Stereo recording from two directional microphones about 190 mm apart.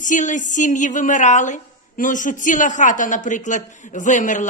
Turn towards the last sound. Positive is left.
turn(degrees=40)  # may be behind; listen again after turning